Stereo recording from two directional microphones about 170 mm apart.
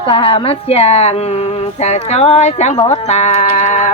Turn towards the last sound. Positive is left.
turn(degrees=45)  # may be behind; listen again after turning